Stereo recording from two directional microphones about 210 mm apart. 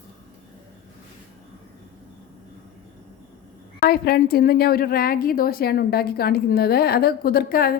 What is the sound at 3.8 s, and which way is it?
A woman's voice, 45° left (ahead or behind).